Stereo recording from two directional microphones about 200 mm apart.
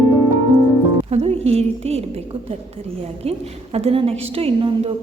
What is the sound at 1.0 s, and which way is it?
A woman's voice, 30° right (ahead or behind).